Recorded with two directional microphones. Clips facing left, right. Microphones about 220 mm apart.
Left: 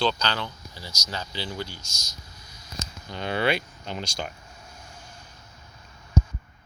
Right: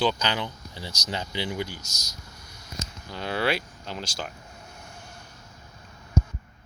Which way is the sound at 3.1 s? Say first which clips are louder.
Left 1 dB; 5° right (ahead or behind).